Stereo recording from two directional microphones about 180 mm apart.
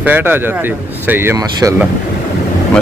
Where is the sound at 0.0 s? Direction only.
10° right (ahead or behind).